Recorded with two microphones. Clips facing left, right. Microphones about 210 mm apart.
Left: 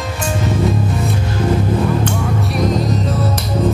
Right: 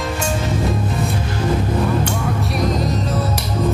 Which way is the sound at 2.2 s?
Centre (ahead or behind).